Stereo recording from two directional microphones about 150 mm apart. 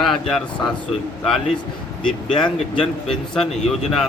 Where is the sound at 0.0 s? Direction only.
5° left (ahead or behind).